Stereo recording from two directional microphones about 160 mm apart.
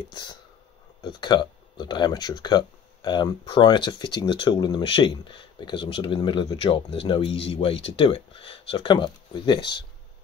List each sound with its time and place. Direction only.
0.1 s speech: 30° left (ahead or behind)